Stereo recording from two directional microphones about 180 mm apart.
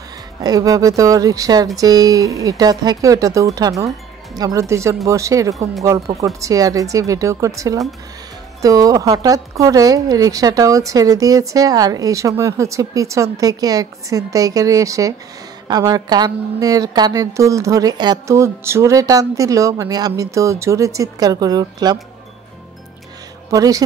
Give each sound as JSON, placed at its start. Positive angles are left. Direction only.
{"t": 0.4, "sound": "speech", "side_deg": -20}
{"t": 23.5, "sound": "speech", "side_deg": -20}